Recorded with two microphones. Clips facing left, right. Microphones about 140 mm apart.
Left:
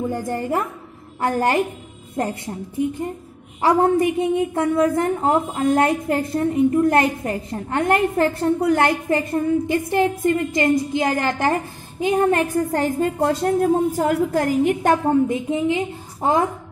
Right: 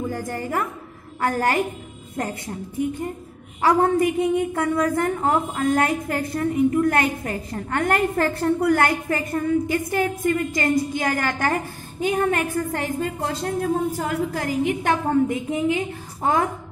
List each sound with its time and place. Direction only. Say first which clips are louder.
0.1 s a woman's voice: left 4 dB; 25° left (ahead or behind)
3.6 s a woman's voice: left 2 dB; 25° left (ahead or behind)
13.0 s a woman's voice: left 6 dB; 45° left (ahead or behind)
15.0 s a woman's voice: left 2 dB; 25° left (ahead or behind)